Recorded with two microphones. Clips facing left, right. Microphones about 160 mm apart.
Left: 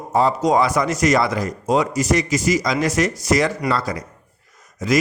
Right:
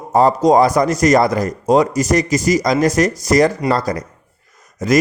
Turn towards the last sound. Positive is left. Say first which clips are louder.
# right 4 dB
turn(degrees=-45)  # may be behind; listen again after turning